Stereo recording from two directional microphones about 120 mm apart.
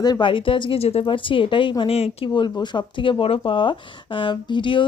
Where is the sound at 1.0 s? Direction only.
45° left (ahead or behind).